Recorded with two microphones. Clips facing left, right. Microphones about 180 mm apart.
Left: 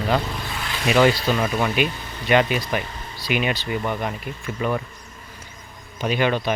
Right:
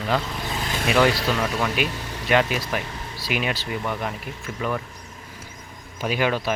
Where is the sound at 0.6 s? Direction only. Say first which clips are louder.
Left 2 dB; 45° right (ahead or behind).